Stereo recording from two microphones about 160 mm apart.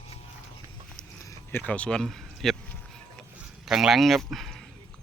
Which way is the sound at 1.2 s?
20° left (ahead or behind).